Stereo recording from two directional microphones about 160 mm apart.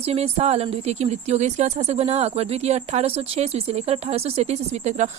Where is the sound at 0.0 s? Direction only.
40° right (ahead or behind).